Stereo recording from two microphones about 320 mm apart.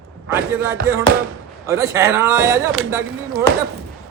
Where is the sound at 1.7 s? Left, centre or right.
Centre.